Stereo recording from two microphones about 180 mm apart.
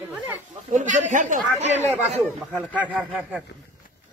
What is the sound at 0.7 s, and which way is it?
A man's voice, 45° right (ahead or behind).